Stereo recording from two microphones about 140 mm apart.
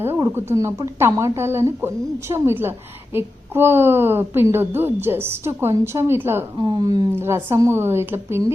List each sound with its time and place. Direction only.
0.2 s a woman's voice: 20° right (ahead or behind)
6.6 s speech: 30° right (ahead or behind)
7.2 s a woman's voice: 20° right (ahead or behind)